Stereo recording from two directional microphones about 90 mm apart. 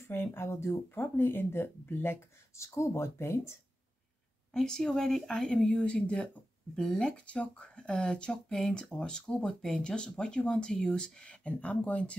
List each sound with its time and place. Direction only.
0.1 s speech: 25° left (ahead or behind)
4.6 s speech: 5° left (ahead or behind)